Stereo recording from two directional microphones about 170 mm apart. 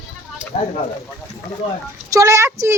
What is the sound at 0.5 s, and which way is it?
Speech, 35° left (ahead or behind).